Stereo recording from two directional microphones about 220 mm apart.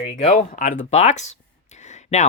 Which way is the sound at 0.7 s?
30° left (ahead or behind).